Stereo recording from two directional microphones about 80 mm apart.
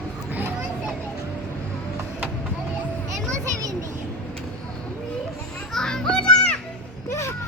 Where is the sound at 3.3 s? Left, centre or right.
Right.